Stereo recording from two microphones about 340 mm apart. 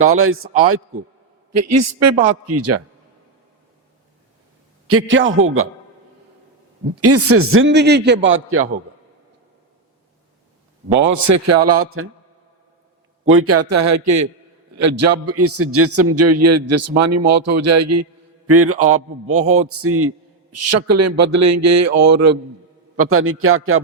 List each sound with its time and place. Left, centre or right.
0.0 s a man's voice: right
4.9 s a man's voice: right
6.9 s a man's voice: right
11.1 s a man's voice: right
13.2 s a man's voice: right
23.0 s a man's voice: right